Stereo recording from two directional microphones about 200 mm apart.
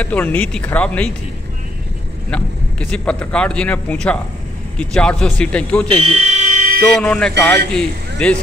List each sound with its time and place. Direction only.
0.0 s speech: 5° left (ahead or behind)
2.3 s speech: 5° left (ahead or behind)
5.9 s fire alarm: 30° right (ahead or behind)
7.0 s speech: 5° left (ahead or behind)